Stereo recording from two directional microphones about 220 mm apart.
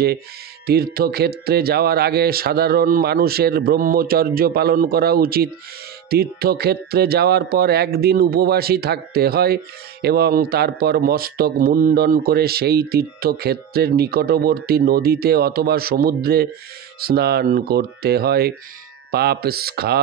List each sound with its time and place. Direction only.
0.7 s speech: 45° right (ahead or behind)